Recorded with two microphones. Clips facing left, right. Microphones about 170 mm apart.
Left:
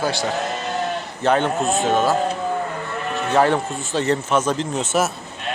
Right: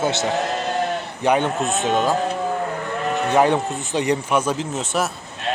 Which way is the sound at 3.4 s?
20° right (ahead or behind).